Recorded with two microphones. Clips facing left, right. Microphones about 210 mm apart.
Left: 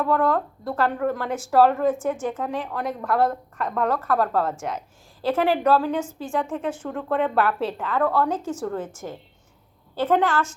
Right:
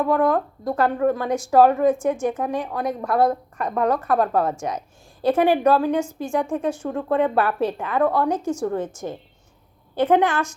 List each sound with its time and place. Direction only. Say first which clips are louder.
0.0 s speech: right 2 dB; 15° right (ahead or behind)